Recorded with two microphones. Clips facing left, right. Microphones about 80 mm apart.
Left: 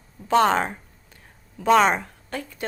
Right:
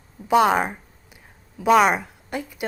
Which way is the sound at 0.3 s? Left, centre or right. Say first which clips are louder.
Right 1 dB; centre.